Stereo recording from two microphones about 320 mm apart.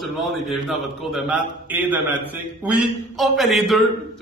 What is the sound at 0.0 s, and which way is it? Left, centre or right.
A man's voice, centre.